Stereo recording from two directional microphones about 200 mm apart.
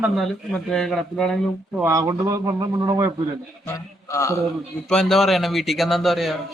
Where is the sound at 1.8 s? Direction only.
15° right (ahead or behind).